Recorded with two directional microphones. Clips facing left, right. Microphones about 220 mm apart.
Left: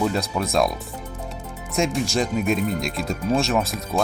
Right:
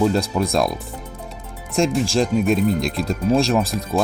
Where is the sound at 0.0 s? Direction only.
Centre (ahead or behind).